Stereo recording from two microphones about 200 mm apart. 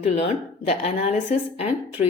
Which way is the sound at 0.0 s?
30° left (ahead or behind).